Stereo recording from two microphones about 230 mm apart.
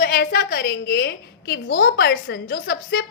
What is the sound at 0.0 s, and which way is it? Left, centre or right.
A woman's voice, left.